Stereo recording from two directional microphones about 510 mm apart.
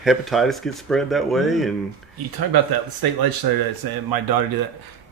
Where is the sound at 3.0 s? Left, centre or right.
Right.